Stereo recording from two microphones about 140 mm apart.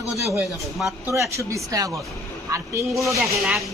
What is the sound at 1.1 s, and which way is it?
Speech, 20° right (ahead or behind).